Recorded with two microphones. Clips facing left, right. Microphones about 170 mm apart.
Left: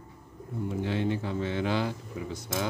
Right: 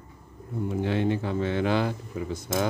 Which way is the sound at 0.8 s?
60° right (ahead or behind).